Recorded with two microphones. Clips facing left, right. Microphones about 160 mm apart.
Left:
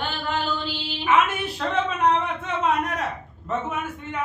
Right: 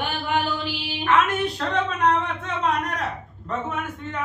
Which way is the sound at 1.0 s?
5° left (ahead or behind).